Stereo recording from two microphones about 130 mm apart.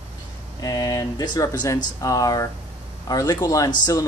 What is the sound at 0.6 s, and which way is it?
A man's voice, 30° left (ahead or behind).